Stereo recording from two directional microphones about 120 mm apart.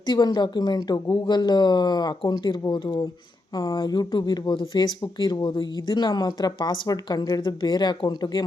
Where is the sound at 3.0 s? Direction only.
30° left (ahead or behind).